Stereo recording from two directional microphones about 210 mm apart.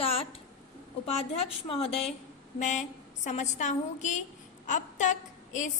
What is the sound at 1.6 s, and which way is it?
A woman's voice, 25° left (ahead or behind).